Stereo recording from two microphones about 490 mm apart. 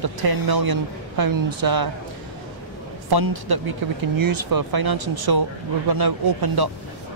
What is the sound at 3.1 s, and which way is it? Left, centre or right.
Speech, right.